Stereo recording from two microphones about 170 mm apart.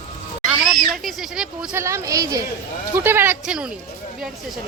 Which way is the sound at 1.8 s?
15° right (ahead or behind).